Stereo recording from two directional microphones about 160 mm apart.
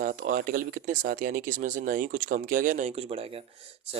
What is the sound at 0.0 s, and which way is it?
Speech, 55° right (ahead or behind).